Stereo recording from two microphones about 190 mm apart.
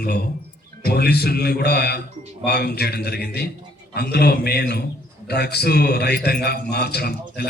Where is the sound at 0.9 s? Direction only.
60° left (ahead or behind).